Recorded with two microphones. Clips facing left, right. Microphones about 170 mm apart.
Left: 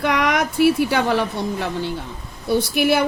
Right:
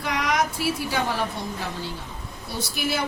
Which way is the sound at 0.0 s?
65° left (ahead or behind).